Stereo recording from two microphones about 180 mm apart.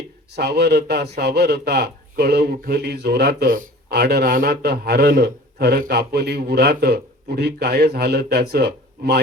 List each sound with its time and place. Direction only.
0.3 s a man's voice: 65° right (ahead or behind)